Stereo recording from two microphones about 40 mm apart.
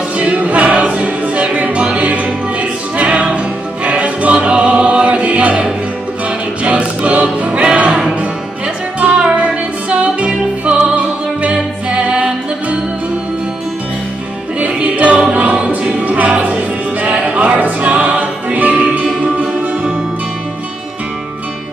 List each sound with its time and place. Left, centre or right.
0.2 s music: right
9.2 s music: right
14.7 s music: right